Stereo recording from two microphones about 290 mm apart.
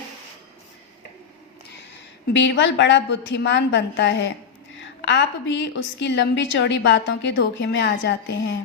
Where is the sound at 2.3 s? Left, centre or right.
Left.